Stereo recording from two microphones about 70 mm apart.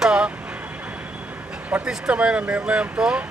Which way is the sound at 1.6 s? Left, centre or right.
Right.